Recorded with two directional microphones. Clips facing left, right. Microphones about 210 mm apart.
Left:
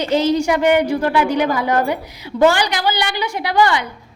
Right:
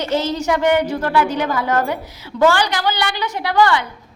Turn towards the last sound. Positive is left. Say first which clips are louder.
# even
turn(degrees=15)  # may be behind; listen again after turning